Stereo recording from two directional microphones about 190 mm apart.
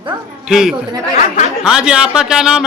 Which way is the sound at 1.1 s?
40° left (ahead or behind).